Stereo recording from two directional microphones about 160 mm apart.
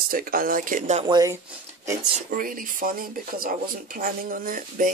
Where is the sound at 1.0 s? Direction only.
25° right (ahead or behind).